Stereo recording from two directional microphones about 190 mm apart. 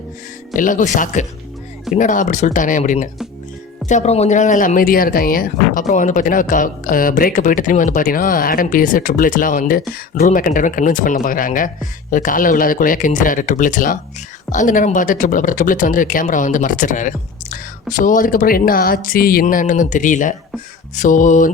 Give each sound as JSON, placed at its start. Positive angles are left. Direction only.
{"t": 0.5, "sound": "speech", "side_deg": 45}
{"t": 20.9, "sound": "music", "side_deg": 40}